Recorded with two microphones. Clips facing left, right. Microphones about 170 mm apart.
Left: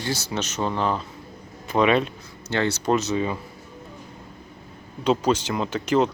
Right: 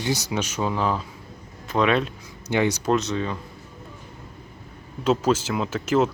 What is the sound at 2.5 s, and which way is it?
Speech, 15° right (ahead or behind).